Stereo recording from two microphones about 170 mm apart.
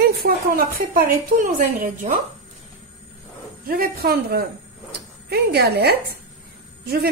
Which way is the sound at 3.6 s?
60° right (ahead or behind).